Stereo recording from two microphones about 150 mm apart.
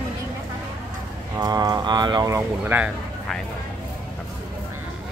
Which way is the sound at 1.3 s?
25° right (ahead or behind).